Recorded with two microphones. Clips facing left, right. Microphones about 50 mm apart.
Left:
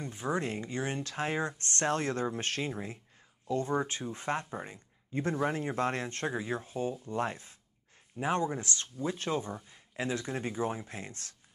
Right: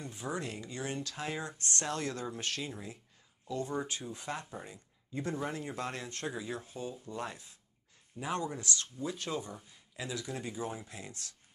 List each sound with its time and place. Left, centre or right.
0.0 s speech: left